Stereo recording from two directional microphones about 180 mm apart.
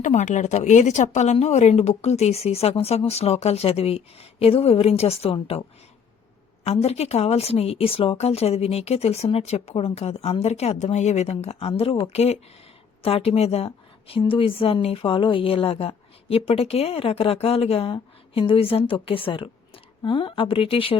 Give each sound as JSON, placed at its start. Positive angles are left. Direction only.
{"t": 0.0, "sound": "a woman's voice", "side_deg": 40}
{"t": 6.7, "sound": "a woman's voice", "side_deg": 35}